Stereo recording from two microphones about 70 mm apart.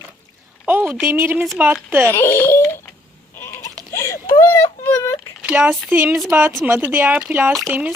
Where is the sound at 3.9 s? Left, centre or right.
Left.